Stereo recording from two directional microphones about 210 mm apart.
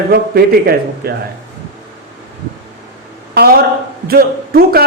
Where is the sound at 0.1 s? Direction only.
45° right (ahead or behind).